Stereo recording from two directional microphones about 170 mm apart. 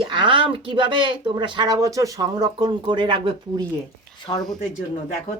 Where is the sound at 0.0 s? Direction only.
30° right (ahead or behind).